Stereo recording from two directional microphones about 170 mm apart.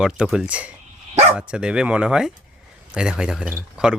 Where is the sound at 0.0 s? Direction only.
5° right (ahead or behind).